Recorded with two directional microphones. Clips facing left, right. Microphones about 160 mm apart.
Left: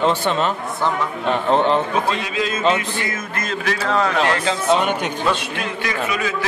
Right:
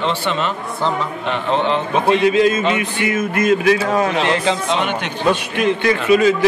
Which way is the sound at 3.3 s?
15° right (ahead or behind).